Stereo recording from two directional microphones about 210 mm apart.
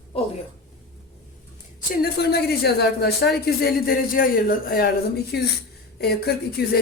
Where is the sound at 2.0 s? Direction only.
50° left (ahead or behind).